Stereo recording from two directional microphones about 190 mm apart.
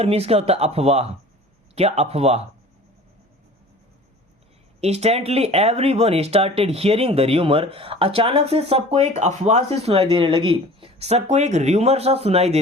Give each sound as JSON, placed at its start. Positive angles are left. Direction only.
{"t": 0.0, "sound": "speech", "side_deg": -30}
{"t": 4.8, "sound": "speech", "side_deg": -35}